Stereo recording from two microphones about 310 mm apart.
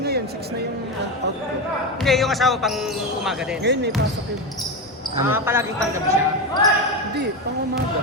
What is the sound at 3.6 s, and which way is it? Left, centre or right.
Speech, right.